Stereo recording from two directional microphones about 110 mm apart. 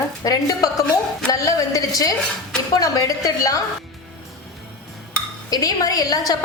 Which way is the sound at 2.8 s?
30° left (ahead or behind).